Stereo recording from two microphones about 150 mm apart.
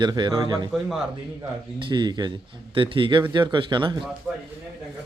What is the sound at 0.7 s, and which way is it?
Speech, centre (ahead or behind).